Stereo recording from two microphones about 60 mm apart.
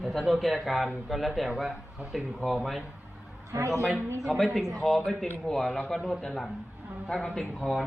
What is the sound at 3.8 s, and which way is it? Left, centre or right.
A man's voice, centre.